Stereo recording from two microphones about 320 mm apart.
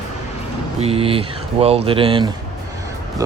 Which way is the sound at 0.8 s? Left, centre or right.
Centre.